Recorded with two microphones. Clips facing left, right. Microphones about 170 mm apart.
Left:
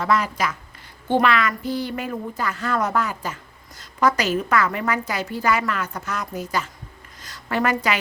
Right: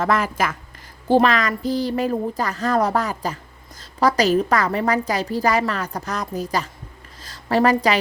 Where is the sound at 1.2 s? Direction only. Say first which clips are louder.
Right 2 dB; 40° right (ahead or behind).